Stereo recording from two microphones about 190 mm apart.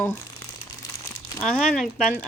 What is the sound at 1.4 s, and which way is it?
Speech, 5° left (ahead or behind).